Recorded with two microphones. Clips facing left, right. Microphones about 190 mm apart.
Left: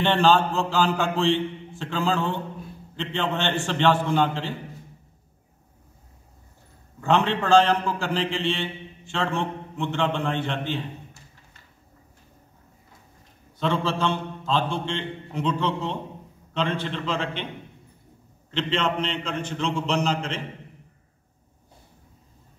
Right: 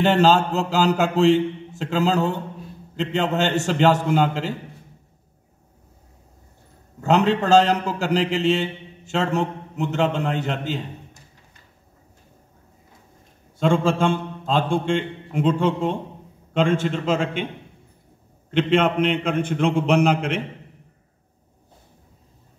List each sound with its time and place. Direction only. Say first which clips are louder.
0.0 s a man's voice: right 3 dB; 40° right (ahead or behind)
7.0 s a man's voice: right 4 dB; 40° right (ahead or behind)
13.6 s a man's voice: right 6 dB; 45° right (ahead or behind)
18.5 s a man's voice: right 7 dB; 55° right (ahead or behind)